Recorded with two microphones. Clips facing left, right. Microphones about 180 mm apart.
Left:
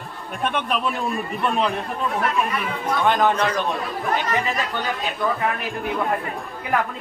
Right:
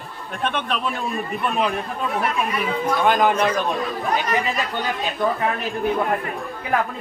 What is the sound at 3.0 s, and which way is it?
Speech, 10° right (ahead or behind).